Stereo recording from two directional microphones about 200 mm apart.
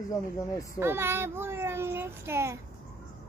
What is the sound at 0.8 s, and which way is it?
A child's voice, 10° right (ahead or behind).